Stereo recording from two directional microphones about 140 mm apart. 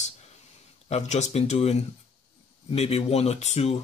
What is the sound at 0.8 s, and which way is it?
Speech, 55° left (ahead or behind).